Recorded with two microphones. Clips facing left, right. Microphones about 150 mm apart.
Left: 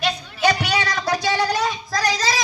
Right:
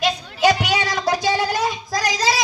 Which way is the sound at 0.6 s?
15° right (ahead or behind).